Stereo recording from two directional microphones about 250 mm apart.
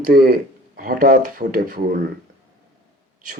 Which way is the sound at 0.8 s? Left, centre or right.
Right.